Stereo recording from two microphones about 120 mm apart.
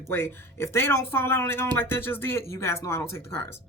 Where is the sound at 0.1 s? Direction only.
20° left (ahead or behind).